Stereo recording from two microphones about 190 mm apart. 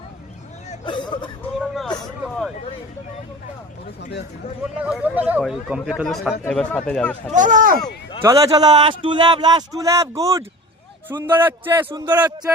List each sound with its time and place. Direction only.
0.7 s hubbub: 25° left (ahead or behind)
1.5 s a man's voice: centre (ahead or behind)
4.6 s a man's voice: 5° right (ahead or behind)
7.3 s speech: 40° right (ahead or behind)
8.2 s a man's voice: 20° right (ahead or behind)
11.9 s a man's voice: 25° right (ahead or behind)